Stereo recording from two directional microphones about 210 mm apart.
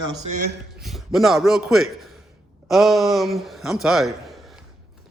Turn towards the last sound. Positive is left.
turn(degrees=0)  # may be behind; listen again after turning